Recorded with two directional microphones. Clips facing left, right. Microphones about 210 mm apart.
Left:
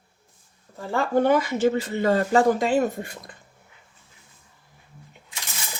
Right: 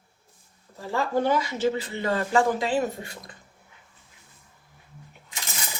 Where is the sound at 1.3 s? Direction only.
55° left (ahead or behind).